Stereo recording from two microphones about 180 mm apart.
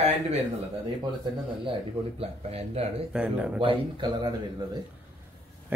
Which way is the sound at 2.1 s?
35° right (ahead or behind).